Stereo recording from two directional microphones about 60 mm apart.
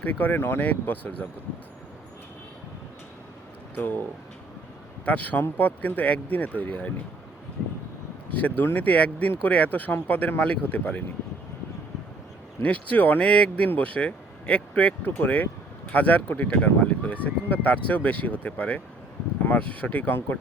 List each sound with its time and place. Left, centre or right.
0.0 s speech: left
3.8 s speech: left
5.0 s speech: left
8.3 s speech: left
12.6 s speech: left